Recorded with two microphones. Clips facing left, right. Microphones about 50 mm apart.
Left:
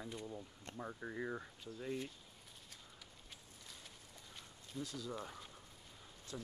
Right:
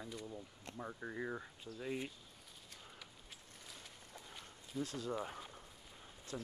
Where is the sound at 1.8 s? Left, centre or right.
Right.